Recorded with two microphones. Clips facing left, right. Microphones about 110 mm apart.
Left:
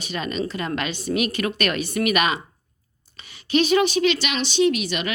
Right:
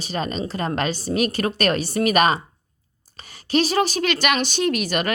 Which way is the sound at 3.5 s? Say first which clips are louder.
Left 1 dB; 35° right (ahead or behind).